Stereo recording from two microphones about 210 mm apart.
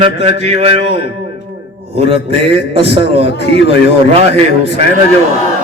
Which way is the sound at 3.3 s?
55° left (ahead or behind).